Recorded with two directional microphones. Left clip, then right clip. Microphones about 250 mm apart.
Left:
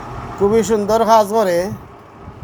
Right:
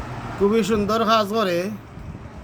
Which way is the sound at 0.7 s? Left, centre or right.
Centre.